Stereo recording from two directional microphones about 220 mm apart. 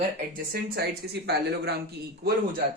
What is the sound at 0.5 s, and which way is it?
Speech, 45° right (ahead or behind).